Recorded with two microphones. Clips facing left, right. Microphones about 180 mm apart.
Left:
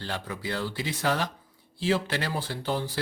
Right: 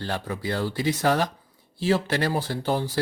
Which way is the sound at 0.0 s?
45° right (ahead or behind).